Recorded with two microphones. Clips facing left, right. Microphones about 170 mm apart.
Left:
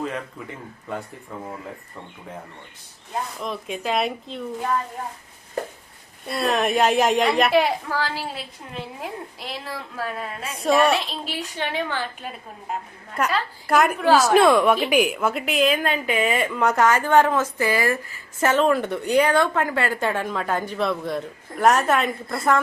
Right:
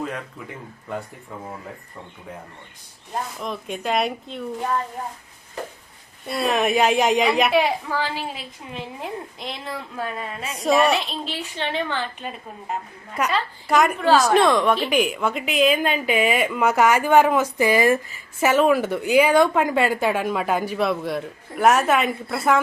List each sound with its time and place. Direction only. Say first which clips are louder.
3.3 s a woman's voice: even; centre (ahead or behind)
6.2 s a woman's voice: right 1 dB; centre (ahead or behind)
7.9 s speech: right 1 dB; 15° right (ahead or behind)
9.0 s a woman's voice: right 1 dB; 5° left (ahead or behind)
15.8 s a woman's voice: right 2 dB; 20° right (ahead or behind)
16.4 s speech: right 1 dB; 5° right (ahead or behind)